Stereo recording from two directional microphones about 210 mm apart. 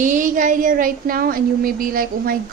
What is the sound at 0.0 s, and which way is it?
A woman's voice, 40° right (ahead or behind).